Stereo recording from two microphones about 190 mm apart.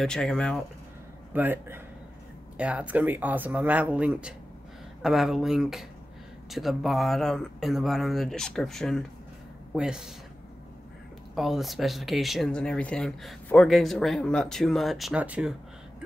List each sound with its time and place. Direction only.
0.0 s speech: 5° left (ahead or behind)
1.3 s speech: 10° right (ahead or behind)
11.3 s speech: centre (ahead or behind)